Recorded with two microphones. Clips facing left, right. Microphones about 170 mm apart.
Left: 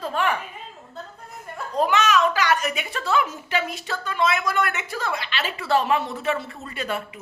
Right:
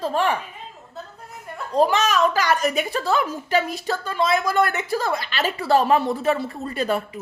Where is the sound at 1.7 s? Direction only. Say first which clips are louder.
Right 2 dB; 35° right (ahead or behind).